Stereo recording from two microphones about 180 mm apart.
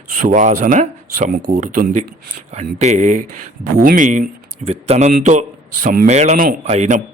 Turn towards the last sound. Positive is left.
turn(degrees=-40)  # may be behind; listen again after turning